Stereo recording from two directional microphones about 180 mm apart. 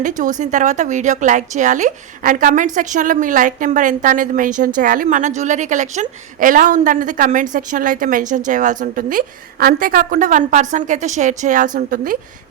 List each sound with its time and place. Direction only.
0.0 s a woman's voice: 45° right (ahead or behind)